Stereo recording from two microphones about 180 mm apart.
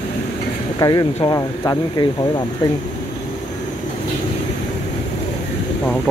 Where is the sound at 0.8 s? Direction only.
25° left (ahead or behind).